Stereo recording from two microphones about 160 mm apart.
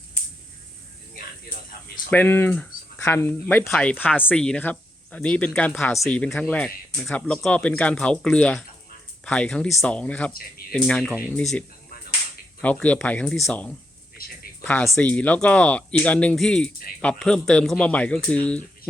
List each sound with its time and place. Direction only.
2.0 s speech: 10° left (ahead or behind)
12.6 s speech: 10° left (ahead or behind)
14.2 s speech: 70° left (ahead or behind)
14.6 s speech: 10° left (ahead or behind)